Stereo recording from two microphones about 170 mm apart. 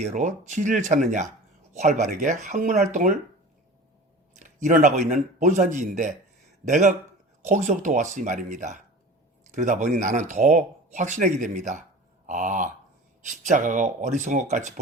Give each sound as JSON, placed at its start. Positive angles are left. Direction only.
{"t": 0.1, "sound": "speech", "side_deg": -45}
{"t": 4.4, "sound": "speech", "side_deg": -45}